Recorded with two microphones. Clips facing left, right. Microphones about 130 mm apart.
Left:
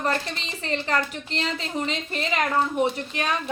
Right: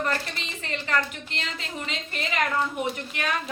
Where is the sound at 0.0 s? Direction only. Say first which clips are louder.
Left 2 dB; 35° left (ahead or behind).